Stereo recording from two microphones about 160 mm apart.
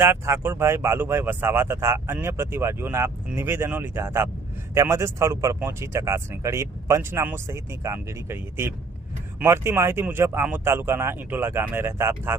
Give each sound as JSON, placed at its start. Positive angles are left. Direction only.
{"t": 0.0, "sound": "speech", "side_deg": -15}